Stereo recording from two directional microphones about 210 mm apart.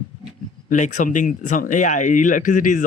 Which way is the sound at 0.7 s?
35° left (ahead or behind).